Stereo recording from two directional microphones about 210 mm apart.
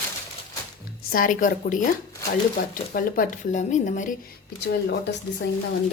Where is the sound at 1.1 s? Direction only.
40° left (ahead or behind).